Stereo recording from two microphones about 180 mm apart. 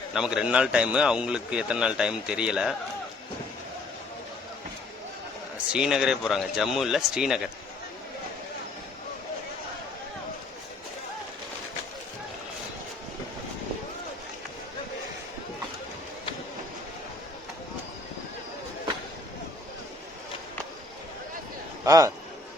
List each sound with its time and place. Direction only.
0.1 s a man's voice: 5° right (ahead or behind)
5.7 s a man's voice: 5° right (ahead or behind)
21.8 s a man's voice: 20° right (ahead or behind)